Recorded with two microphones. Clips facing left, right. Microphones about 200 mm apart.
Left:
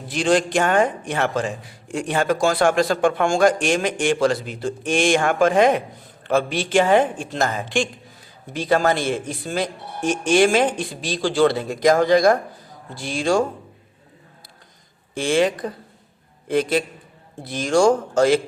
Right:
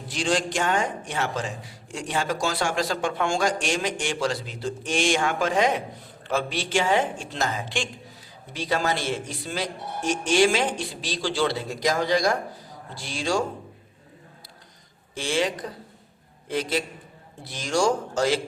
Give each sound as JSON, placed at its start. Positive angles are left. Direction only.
{"t": 0.1, "sound": "a man's voice", "side_deg": 55}
{"t": 15.1, "sound": "speech", "side_deg": 55}